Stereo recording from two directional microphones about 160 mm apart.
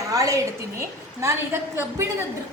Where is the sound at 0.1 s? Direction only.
20° right (ahead or behind).